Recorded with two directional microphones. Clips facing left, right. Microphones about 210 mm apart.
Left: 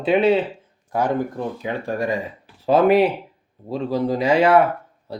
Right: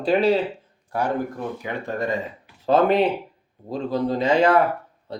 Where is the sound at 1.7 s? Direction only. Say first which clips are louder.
Left 2 dB; 15° left (ahead or behind).